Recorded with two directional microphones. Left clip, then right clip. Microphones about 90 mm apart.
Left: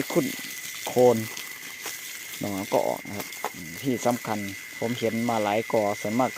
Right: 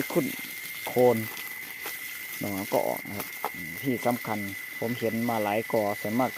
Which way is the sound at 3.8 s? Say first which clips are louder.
Left 2 dB; 15° left (ahead or behind).